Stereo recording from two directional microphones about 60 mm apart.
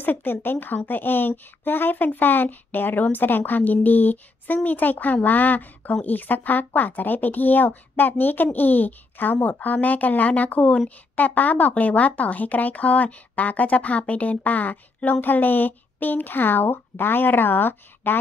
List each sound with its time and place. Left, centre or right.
0.0 s a woman's voice: left